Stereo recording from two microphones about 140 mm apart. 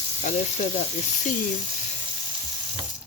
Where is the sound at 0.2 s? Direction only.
55° left (ahead or behind).